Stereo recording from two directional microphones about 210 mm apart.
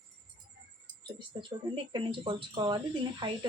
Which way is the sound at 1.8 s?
25° right (ahead or behind).